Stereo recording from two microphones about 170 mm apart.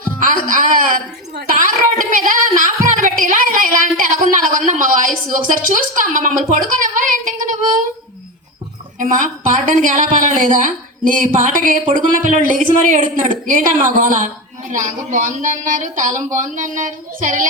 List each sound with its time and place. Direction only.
0.2 s speech: 50° right (ahead or behind)
9.0 s speech: 50° right (ahead or behind)